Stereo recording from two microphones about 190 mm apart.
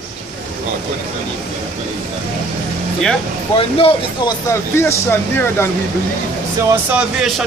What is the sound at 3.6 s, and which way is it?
Speech, 30° left (ahead or behind).